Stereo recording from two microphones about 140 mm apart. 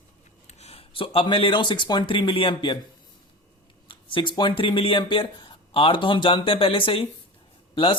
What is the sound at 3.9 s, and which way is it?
Speech, 35° left (ahead or behind).